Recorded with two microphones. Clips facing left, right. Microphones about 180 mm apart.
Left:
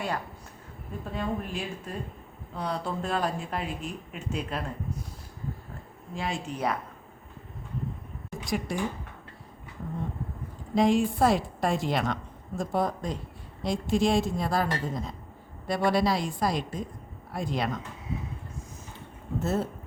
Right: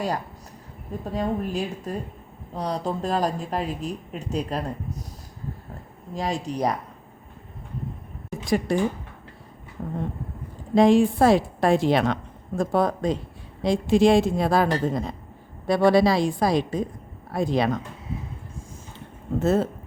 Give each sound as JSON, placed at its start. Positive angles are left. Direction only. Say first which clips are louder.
{"t": 1.0, "sound": "a woman's voice", "louder": "right 6 dB", "side_deg": -40}
{"t": 6.1, "sound": "a woman's voice", "louder": "right 6 dB", "side_deg": -40}
{"t": 8.4, "sound": "a woman's voice", "louder": "right 7 dB", "side_deg": -75}
{"t": 9.8, "sound": "a sound", "louder": "right 5 dB", "side_deg": -50}
{"t": 10.8, "sound": "a woman's voice", "louder": "right 6 dB", "side_deg": -90}
{"t": 19.4, "sound": "speech", "louder": "right 7 dB", "side_deg": -90}